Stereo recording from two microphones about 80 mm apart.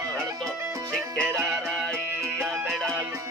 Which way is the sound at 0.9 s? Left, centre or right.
Centre.